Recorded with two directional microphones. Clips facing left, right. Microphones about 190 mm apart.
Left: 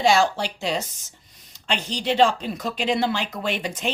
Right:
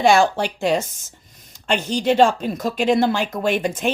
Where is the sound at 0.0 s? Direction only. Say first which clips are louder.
Right 4 dB; 55° right (ahead or behind).